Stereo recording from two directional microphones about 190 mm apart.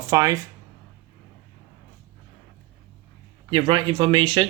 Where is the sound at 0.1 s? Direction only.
15° right (ahead or behind).